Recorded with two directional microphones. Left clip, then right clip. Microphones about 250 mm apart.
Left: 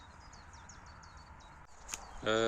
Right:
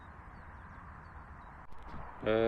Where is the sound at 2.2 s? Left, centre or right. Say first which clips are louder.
Right 2 dB; centre.